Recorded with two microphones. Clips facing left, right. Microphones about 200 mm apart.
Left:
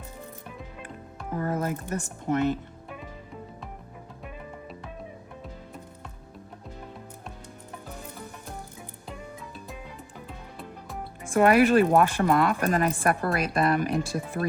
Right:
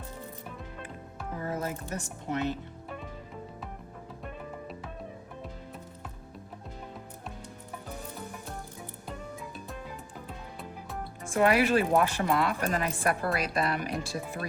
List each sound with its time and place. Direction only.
1.4 s a woman's voice: 55° left (ahead or behind)
11.3 s a woman's voice: 50° left (ahead or behind)